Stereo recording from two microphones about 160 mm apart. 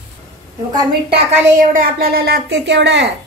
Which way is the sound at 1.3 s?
55° right (ahead or behind).